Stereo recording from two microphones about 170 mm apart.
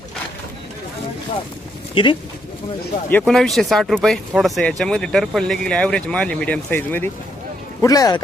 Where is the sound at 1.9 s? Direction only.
30° left (ahead or behind).